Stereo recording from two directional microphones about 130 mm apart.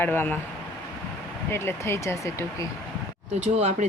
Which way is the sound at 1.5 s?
20° left (ahead or behind).